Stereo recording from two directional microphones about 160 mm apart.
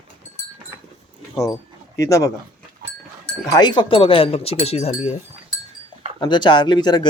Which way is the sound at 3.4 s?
25° left (ahead or behind).